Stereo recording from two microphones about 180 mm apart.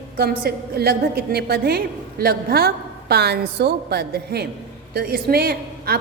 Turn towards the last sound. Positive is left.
turn(degrees=-60)  # may be behind; listen again after turning